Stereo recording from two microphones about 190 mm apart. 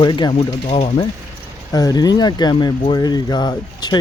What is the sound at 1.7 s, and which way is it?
Speech, 20° left (ahead or behind).